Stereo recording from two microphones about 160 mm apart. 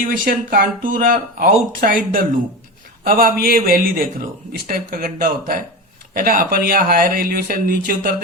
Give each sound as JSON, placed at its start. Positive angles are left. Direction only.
{"t": 0.0, "sound": "speech", "side_deg": -60}